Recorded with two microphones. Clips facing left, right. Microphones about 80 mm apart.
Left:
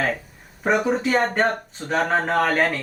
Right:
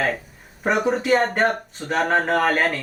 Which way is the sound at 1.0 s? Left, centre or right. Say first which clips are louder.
Right 1 dB; centre.